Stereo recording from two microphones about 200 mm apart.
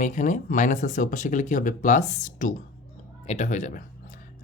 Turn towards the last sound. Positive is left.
turn(degrees=40)  # may be behind; listen again after turning